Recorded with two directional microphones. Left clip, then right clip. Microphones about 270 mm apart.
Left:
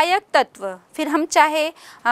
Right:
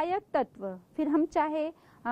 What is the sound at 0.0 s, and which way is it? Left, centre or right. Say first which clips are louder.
A woman's voice: left 12 dB; centre.